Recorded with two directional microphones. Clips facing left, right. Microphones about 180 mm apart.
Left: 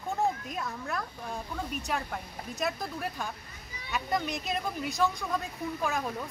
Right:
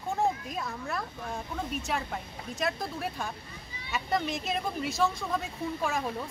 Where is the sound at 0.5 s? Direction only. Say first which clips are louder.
Even; centre (ahead or behind).